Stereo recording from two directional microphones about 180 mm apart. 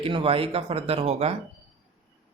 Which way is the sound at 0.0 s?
30° right (ahead or behind).